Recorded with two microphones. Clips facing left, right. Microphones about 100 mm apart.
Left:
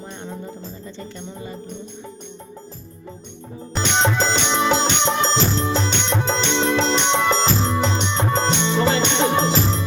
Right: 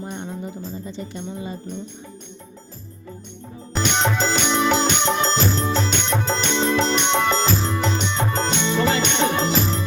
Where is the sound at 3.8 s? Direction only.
30° left (ahead or behind).